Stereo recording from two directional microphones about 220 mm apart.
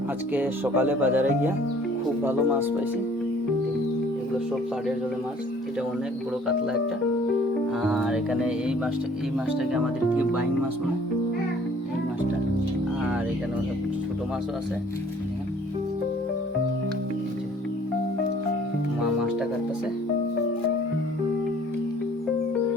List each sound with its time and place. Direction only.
0.3 s speech: 10° right (ahead or behind)
7.8 s speech: centre (ahead or behind)